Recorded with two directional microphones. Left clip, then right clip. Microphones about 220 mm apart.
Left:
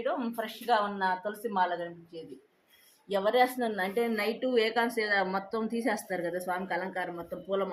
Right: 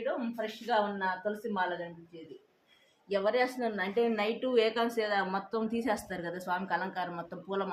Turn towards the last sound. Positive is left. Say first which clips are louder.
# left 3 dB
turn(degrees=-5)  # may be behind; listen again after turning